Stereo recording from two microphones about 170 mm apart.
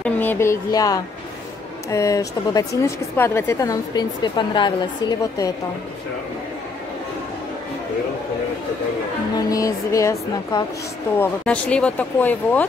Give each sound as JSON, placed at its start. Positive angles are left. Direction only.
{"t": 0.0, "sound": "a woman's voice", "side_deg": 10}
{"t": 9.4, "sound": "a woman's voice", "side_deg": 20}